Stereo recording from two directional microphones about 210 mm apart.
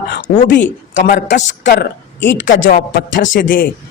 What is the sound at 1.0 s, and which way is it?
A man's voice, 45° left (ahead or behind).